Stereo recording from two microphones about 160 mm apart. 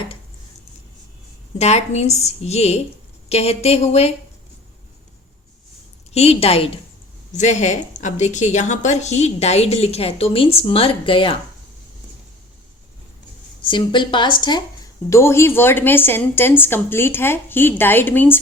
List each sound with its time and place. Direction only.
1.5 s a woman's voice: 45° left (ahead or behind)
6.1 s speech: 40° left (ahead or behind)
13.6 s a woman's voice: 30° left (ahead or behind)
15.1 s a woman's voice: 15° left (ahead or behind)